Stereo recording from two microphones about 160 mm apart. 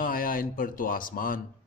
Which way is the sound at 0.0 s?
60° left (ahead or behind).